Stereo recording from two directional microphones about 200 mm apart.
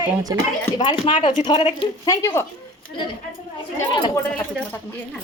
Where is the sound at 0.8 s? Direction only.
25° left (ahead or behind).